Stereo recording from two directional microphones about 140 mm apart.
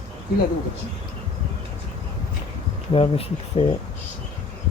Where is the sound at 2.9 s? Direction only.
45° left (ahead or behind).